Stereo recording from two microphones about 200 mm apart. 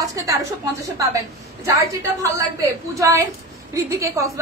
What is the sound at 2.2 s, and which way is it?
A woman's voice, 15° right (ahead or behind).